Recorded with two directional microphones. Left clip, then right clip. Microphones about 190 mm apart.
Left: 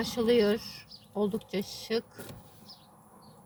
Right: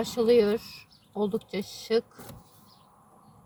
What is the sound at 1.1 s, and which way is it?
Speech, 20° right (ahead or behind).